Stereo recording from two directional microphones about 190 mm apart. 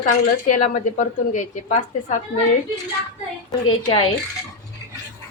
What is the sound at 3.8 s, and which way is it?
Speech, 25° left (ahead or behind).